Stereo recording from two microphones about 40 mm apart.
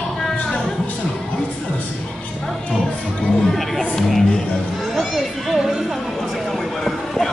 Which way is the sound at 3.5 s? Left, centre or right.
Centre.